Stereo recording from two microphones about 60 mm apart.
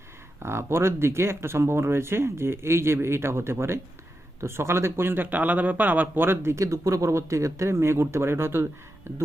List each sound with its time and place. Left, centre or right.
0.4 s speech: right